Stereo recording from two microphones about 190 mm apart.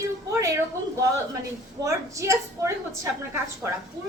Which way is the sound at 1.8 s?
15° right (ahead or behind).